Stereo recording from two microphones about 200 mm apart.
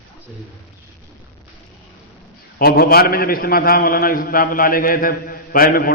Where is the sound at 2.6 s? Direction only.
50° left (ahead or behind).